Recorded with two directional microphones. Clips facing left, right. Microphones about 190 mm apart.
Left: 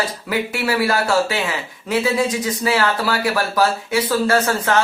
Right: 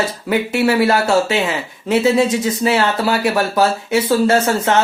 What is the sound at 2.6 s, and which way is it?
Speech, 25° right (ahead or behind).